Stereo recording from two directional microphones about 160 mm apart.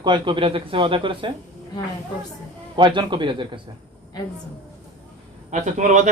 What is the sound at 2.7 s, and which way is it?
Speech, 30° right (ahead or behind).